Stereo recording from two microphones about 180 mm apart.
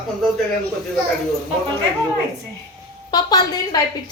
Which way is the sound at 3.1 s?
25° left (ahead or behind).